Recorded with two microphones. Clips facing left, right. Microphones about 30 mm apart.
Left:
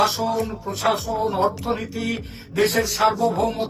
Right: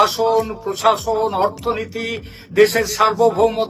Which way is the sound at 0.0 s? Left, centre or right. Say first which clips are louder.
Right 6 dB; right.